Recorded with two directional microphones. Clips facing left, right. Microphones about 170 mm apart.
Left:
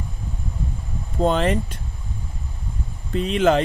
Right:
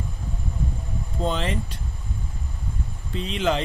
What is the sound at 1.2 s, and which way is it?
Speech, 50° left (ahead or behind).